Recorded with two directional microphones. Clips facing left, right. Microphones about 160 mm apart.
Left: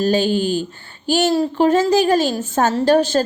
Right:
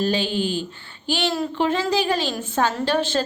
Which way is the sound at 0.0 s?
45° left (ahead or behind).